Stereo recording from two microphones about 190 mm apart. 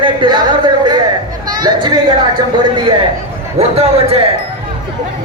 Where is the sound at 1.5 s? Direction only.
20° right (ahead or behind).